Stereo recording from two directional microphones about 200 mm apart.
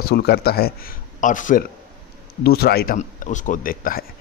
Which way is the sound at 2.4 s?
50° left (ahead or behind).